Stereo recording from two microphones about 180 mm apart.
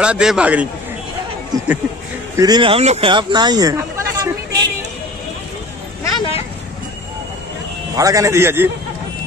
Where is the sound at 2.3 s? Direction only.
25° right (ahead or behind).